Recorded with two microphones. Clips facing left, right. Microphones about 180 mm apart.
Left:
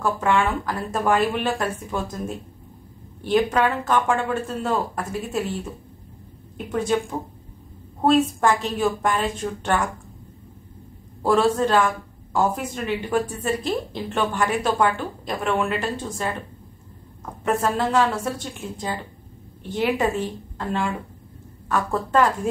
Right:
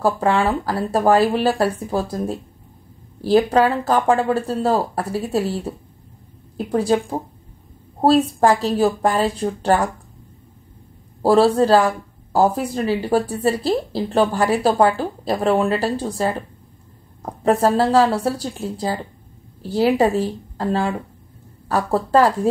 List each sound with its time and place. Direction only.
0.0 s speech: 35° right (ahead or behind)
11.2 s speech: 35° right (ahead or behind)